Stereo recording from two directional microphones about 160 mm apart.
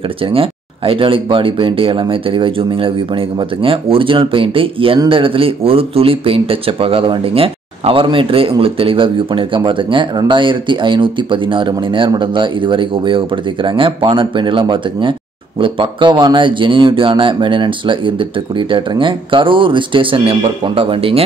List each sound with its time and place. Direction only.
0.3 s speech: 35° right (ahead or behind)